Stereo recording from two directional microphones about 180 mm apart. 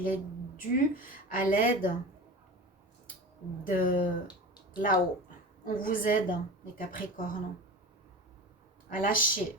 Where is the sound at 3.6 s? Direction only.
50° left (ahead or behind).